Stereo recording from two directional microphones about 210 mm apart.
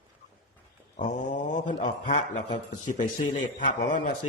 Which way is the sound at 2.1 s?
35° left (ahead or behind).